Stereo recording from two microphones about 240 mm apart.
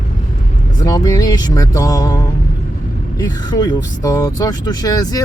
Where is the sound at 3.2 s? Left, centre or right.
Centre.